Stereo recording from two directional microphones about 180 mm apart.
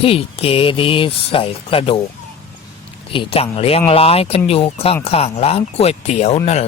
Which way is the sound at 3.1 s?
30° left (ahead or behind).